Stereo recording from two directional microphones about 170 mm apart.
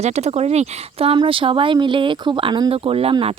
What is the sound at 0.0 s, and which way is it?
A woman's voice, 40° right (ahead or behind).